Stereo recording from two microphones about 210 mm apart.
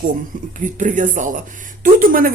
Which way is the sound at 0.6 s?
35° right (ahead or behind).